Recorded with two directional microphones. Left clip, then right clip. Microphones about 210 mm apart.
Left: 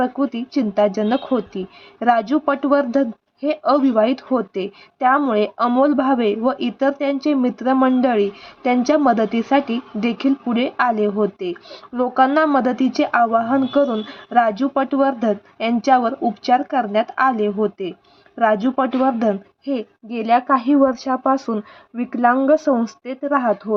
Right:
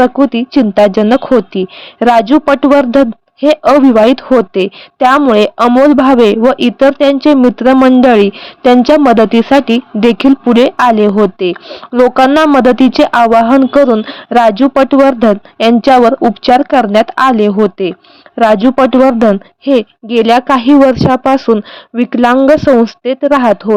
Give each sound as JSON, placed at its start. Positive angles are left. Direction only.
{"t": 0.0, "sound": "speech", "side_deg": -40}